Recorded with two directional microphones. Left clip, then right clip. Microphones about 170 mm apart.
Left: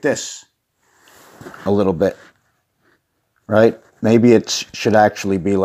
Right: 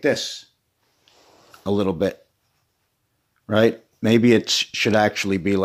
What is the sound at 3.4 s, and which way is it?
Speech, 5° right (ahead or behind).